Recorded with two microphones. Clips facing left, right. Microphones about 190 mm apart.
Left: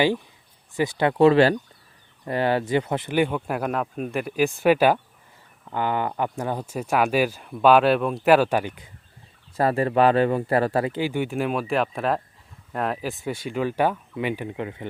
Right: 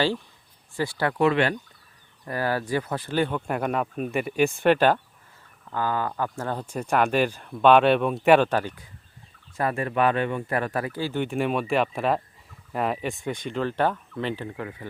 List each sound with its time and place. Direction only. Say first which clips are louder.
0.8 s speech: left 5 dB; 20° left (ahead or behind)
1.3 s speech: left 6 dB; 35° left (ahead or behind)
2.2 s speech: left 4 dB; 25° left (ahead or behind)
5.6 s speech: left 2 dB; 20° left (ahead or behind)
9.6 s speech: left 5 dB; 30° left (ahead or behind)